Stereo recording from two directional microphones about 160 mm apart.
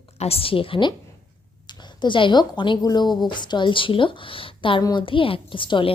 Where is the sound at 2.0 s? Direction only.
30° left (ahead or behind).